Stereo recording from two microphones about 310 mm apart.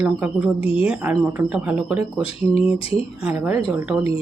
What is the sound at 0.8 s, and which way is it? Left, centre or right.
Speech, centre.